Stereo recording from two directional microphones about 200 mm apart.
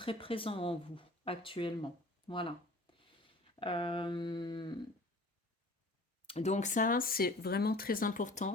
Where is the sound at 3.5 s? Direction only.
25° left (ahead or behind).